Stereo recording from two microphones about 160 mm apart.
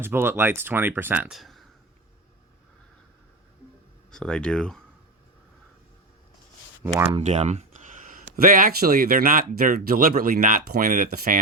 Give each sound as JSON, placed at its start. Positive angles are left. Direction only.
{"t": 0.0, "sound": "speech", "side_deg": -15}
{"t": 4.1, "sound": "speech", "side_deg": 5}
{"t": 6.8, "sound": "speech", "side_deg": -15}
{"t": 7.2, "sound": "speech", "side_deg": -45}